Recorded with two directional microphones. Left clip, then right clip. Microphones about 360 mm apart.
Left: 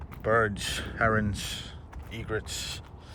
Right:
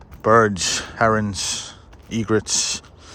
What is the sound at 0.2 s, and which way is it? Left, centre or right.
Speech, centre.